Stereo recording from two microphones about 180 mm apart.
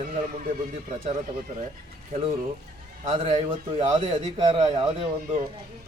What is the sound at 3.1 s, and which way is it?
A man's voice, 35° right (ahead or behind).